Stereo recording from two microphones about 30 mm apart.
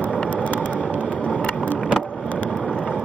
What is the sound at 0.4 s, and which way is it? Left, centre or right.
Vehicle, left.